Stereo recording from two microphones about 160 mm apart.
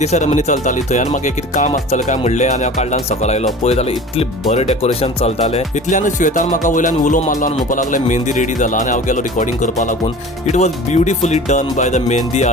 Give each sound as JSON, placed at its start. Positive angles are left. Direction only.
{"t": 0.0, "sound": "speech", "side_deg": 45}